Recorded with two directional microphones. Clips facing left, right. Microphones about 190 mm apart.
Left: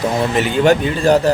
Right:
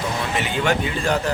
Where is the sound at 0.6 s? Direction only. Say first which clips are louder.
Left 9 dB; 40° left (ahead or behind).